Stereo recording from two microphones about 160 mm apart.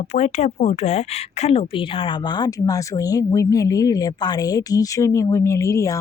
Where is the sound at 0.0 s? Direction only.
45° left (ahead or behind).